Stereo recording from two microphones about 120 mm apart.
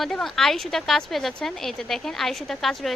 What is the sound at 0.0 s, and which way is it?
Speech, 5° left (ahead or behind).